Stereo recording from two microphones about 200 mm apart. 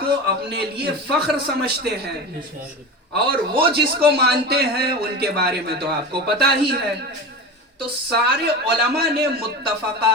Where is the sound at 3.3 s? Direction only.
55° right (ahead or behind).